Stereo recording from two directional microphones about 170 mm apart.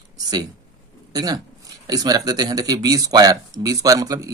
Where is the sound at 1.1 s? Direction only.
20° right (ahead or behind).